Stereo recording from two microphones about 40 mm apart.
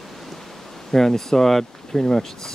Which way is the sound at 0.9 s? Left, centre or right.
Centre.